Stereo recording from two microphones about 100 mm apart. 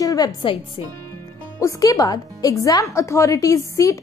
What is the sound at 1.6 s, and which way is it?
A woman's voice, 35° left (ahead or behind).